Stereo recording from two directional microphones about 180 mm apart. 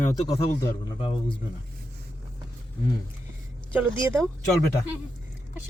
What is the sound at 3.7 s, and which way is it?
Speech, 10° right (ahead or behind).